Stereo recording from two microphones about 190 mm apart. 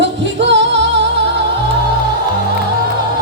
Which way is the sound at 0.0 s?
70° right (ahead or behind).